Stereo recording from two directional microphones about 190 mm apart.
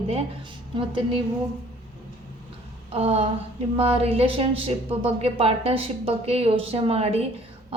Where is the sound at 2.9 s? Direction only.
30° right (ahead or behind).